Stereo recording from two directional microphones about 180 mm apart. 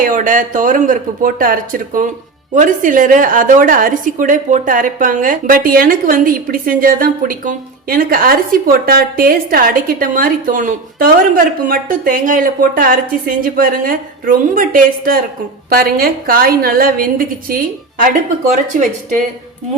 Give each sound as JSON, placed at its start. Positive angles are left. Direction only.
{"t": 0.0, "sound": "a woman's voice", "side_deg": -45}